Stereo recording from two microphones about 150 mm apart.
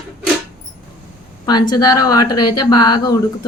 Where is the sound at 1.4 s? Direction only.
30° left (ahead or behind).